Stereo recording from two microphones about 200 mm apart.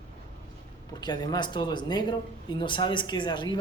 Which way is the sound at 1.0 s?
20° left (ahead or behind).